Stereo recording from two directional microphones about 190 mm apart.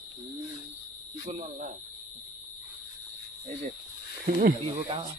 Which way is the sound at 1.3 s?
35° right (ahead or behind).